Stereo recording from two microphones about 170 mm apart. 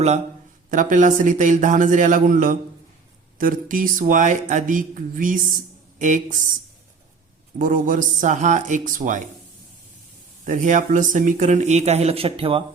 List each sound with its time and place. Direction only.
0.7 s speech: 50° right (ahead or behind)
7.6 s speech: 50° right (ahead or behind)
10.4 s speech: 50° right (ahead or behind); by 12.6 s 35° right (ahead or behind)